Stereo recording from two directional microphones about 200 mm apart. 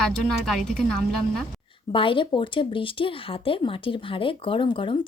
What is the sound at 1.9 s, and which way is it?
Speech, 25° left (ahead or behind).